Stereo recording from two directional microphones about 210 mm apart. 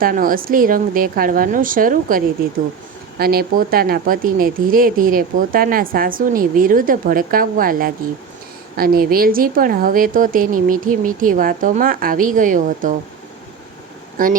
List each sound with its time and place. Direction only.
0.0 s speech: 40° right (ahead or behind)